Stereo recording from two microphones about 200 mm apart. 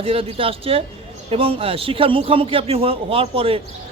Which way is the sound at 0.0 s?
30° right (ahead or behind).